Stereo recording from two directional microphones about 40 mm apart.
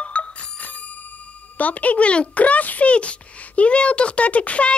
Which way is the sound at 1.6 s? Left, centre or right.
Left.